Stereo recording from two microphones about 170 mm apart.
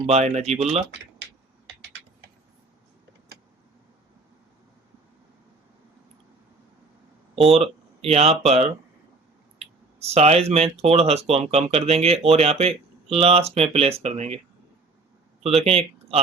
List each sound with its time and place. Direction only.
0.0 s speech: 40° right (ahead or behind)
7.5 s speech: 35° right (ahead or behind)
15.6 s speech: 35° right (ahead or behind)